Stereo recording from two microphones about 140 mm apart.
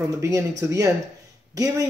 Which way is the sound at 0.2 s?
20° right (ahead or behind).